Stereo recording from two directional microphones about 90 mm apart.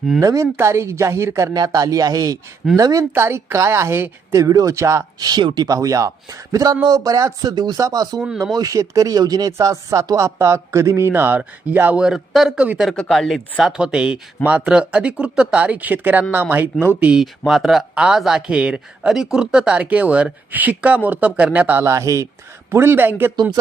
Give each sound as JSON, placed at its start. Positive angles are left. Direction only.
{"t": 0.2, "sound": "speech", "side_deg": -40}
{"t": 1.5, "sound": "speech", "side_deg": -45}
{"t": 3.2, "sound": "a woman's voice", "side_deg": -30}
{"t": 4.4, "sound": "speech", "side_deg": -40}
{"t": 5.2, "sound": "speech", "side_deg": -55}
{"t": 5.6, "sound": "speech", "side_deg": -40}
{"t": 7.5, "sound": "speech", "side_deg": -50}
{"t": 11.9, "sound": "speech", "side_deg": -5}
{"t": 12.9, "sound": "a woman's voice", "side_deg": 5}
{"t": 21.8, "sound": "a woman's voice", "side_deg": -35}